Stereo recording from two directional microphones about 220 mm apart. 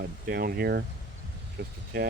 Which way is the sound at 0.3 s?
45° right (ahead or behind).